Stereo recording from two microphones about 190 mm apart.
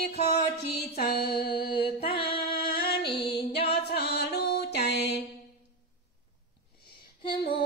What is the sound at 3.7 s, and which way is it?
Music, 60° left (ahead or behind).